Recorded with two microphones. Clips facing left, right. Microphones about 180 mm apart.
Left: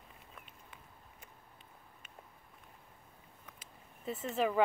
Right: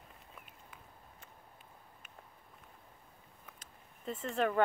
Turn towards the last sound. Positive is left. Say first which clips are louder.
# even
turn(degrees=5)  # may be behind; listen again after turning